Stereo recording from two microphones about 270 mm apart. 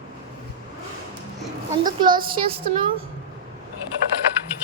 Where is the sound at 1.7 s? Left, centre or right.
Centre.